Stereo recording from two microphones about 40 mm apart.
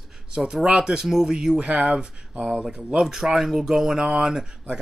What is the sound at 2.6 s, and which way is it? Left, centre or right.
Speech, centre.